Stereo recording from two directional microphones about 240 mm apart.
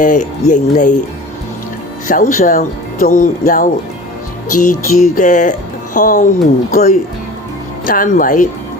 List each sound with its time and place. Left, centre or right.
0.0 s speech: left
2.0 s speech: left